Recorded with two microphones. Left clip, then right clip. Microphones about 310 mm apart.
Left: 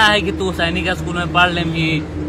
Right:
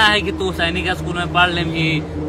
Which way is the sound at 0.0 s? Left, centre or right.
Centre.